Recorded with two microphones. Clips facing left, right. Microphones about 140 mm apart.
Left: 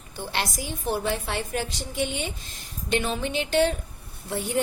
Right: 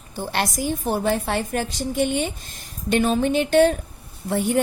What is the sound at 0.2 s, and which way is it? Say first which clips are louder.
A woman's voice: right 6 dB; 50° right (ahead or behind).